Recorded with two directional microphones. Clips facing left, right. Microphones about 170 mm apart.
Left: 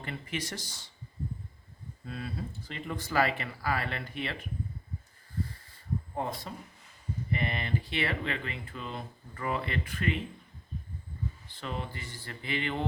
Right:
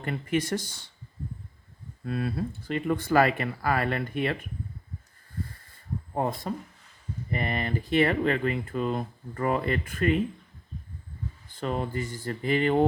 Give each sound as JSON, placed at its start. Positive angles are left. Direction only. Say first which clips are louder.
{"t": 0.0, "sound": "speech", "louder": "right 9 dB", "side_deg": -50}
{"t": 2.0, "sound": "speech", "louder": "right 9 dB", "side_deg": -60}
{"t": 6.5, "sound": "speech", "louder": "right 9 dB", "side_deg": -50}
{"t": 11.4, "sound": "speech", "louder": "right 10 dB", "side_deg": -45}